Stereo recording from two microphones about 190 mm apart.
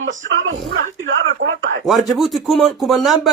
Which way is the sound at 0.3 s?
90° right.